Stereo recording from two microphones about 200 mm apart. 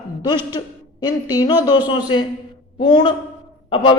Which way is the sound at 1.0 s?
20° left (ahead or behind).